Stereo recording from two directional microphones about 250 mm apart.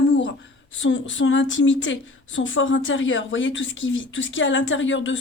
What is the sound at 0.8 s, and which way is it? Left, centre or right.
A woman's voice, left.